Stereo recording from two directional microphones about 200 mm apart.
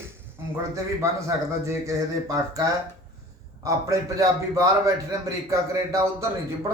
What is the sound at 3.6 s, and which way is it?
A man's voice, 15° right (ahead or behind).